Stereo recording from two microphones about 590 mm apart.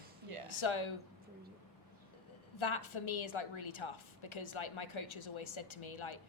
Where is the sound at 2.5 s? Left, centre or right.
Left.